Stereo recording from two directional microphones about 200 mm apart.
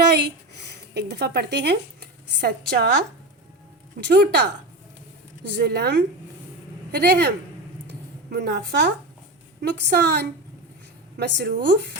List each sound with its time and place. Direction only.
0.7 s speech: 55° right (ahead or behind)
4.0 s a woman's voice: 60° right (ahead or behind)
7.9 s a sound: 55° right (ahead or behind)
9.6 s a woman's voice: 55° right (ahead or behind)